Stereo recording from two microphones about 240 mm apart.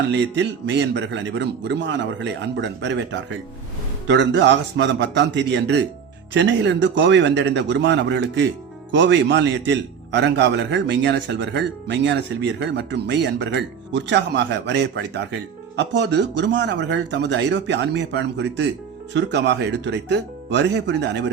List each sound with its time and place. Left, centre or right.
0.1 s a man's voice: right